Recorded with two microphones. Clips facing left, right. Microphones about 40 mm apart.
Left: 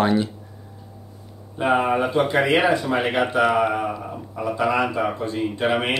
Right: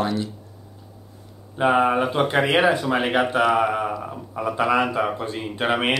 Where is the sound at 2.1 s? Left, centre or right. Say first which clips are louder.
Left 1 dB; right.